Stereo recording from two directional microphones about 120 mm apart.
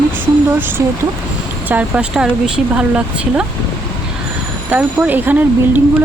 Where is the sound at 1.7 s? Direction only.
5° right (ahead or behind).